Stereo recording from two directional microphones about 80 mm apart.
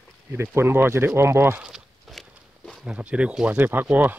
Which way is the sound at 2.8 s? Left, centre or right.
Centre.